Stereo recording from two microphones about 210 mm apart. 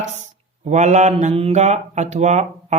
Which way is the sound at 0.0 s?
35° right (ahead or behind).